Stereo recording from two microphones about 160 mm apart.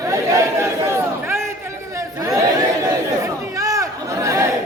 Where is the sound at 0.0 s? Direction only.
20° right (ahead or behind).